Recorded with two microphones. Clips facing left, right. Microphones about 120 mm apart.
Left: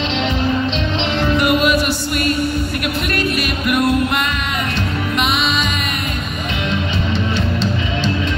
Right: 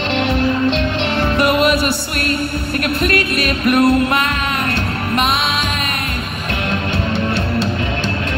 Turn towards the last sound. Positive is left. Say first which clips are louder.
# right 1 dB
turn(degrees=-60)  # may be behind; listen again after turning